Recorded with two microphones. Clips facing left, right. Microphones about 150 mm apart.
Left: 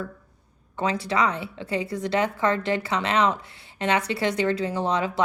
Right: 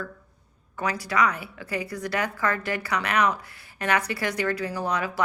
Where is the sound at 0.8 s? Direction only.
25° left (ahead or behind).